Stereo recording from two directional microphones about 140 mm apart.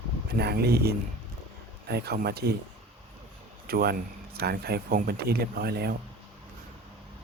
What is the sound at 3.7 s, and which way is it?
Speech, 90° right.